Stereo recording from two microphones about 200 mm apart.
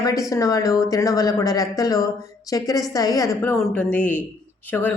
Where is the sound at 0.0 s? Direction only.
15° left (ahead or behind).